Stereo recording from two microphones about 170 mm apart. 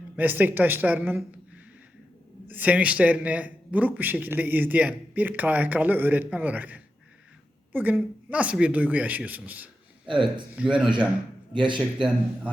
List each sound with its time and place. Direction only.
0.2 s a man's voice: 10° right (ahead or behind)
2.5 s a man's voice: 10° right (ahead or behind)
10.1 s speech: 30° right (ahead or behind)
10.5 s a man's voice: 5° right (ahead or behind)
11.5 s speech: 30° right (ahead or behind)